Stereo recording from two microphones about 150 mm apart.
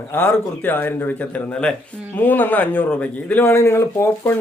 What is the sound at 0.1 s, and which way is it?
Speech, 15° left (ahead or behind).